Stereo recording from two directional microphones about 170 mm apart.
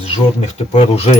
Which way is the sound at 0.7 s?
35° left (ahead or behind).